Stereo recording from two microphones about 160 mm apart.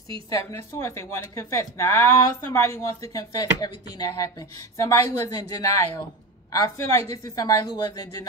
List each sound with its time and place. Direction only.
0.3 s speech: 15° left (ahead or behind)